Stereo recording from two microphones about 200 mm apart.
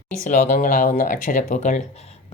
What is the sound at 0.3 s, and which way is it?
Speech, 35° left (ahead or behind).